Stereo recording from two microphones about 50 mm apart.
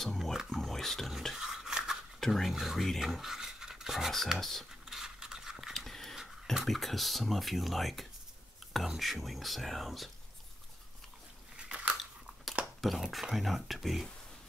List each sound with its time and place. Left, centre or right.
0.0 s speech: centre
1.3 s a sound: centre
2.1 s speech: centre
4.4 s speech: centre
4.8 s mechanisms: centre
5.6 s scratch: centre
6.5 s speech: centre
11.5 s biting: right
12.8 s speech: centre